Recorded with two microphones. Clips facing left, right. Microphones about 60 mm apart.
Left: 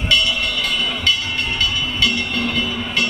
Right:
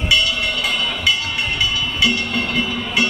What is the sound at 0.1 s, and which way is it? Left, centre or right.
Train, centre.